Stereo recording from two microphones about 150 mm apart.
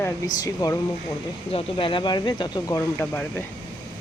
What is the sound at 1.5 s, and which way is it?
Speech, 40° left (ahead or behind).